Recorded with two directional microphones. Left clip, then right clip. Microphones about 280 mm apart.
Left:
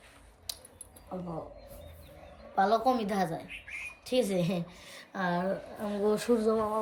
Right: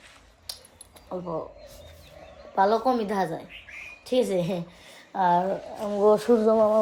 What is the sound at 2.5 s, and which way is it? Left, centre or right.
A woman's voice, centre.